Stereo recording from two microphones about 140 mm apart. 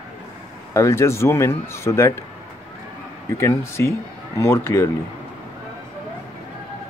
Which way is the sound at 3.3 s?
20° left (ahead or behind).